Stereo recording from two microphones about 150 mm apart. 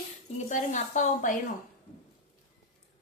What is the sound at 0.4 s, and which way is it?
Speech, 55° left (ahead or behind).